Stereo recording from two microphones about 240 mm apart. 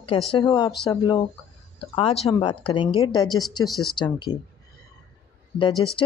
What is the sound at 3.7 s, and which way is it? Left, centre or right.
Speech, centre.